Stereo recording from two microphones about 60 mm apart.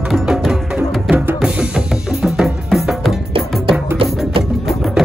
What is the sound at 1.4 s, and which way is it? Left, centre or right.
Music, centre.